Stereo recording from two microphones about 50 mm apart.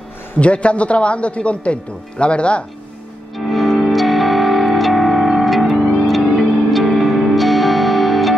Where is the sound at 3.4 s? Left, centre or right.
Centre.